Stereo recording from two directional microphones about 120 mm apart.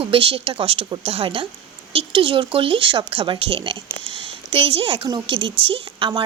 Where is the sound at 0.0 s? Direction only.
50° right (ahead or behind).